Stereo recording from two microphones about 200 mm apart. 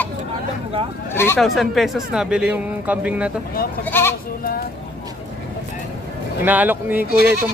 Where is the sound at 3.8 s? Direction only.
10° left (ahead or behind).